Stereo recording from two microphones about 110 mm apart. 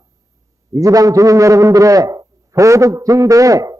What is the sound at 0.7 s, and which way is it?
A man's voice, 30° right (ahead or behind).